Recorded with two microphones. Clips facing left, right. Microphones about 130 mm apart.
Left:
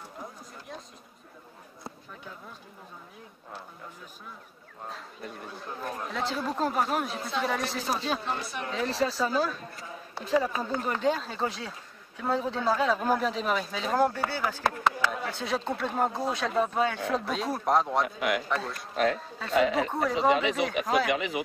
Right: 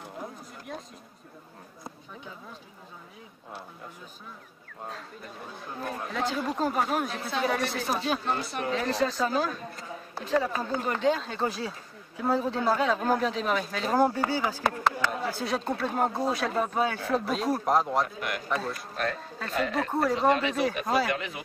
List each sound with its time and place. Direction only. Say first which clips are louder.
5.7 s speech: right 1 dB; centre (ahead or behind)
18.0 s a man's voice: left 5 dB; 90° left
18.5 s speech: right 1 dB; centre (ahead or behind)